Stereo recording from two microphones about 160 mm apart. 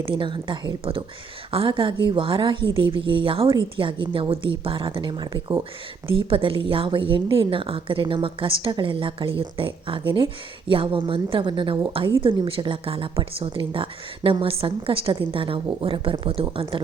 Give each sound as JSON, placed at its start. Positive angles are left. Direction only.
{"t": 0.0, "sound": "a woman's voice", "side_deg": -30}